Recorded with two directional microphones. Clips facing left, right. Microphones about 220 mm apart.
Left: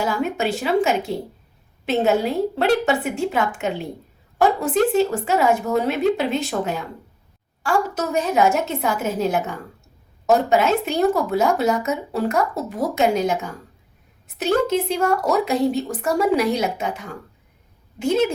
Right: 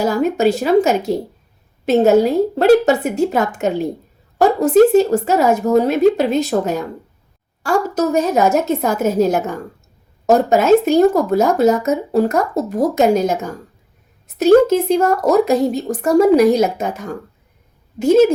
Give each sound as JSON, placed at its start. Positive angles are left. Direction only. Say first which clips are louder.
{"t": 0.0, "sound": "speech", "louder": "right 7 dB", "side_deg": -40}